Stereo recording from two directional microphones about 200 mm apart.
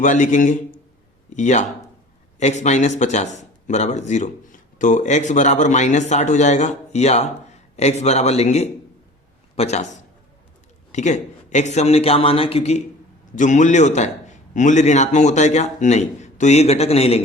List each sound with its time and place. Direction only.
0.0 s a man's voice: 40° left (ahead or behind)
10.9 s speech: 35° left (ahead or behind)